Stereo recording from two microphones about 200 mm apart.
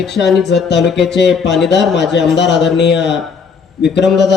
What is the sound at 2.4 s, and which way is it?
Speech, 60° left (ahead or behind).